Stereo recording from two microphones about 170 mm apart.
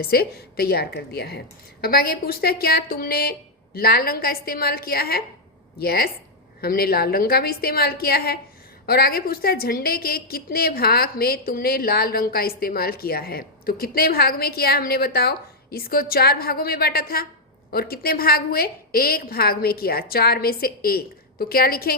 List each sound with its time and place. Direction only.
0.0 s a woman's voice: 65° left (ahead or behind)